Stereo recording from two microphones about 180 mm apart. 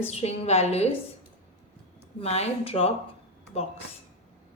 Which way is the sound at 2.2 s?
35° left (ahead or behind).